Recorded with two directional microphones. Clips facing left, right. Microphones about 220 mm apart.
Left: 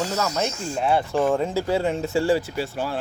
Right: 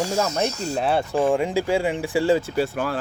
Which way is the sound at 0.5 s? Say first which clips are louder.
Even; 40° right (ahead or behind).